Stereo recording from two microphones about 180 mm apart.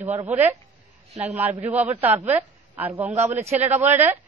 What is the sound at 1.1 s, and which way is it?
Speech, 35° right (ahead or behind).